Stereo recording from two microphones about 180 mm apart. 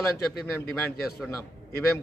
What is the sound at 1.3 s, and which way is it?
Speech, 15° left (ahead or behind).